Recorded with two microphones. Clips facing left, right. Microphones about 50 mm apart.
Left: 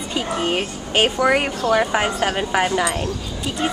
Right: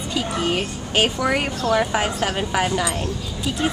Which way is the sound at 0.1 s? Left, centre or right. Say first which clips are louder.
Left 1 dB; left.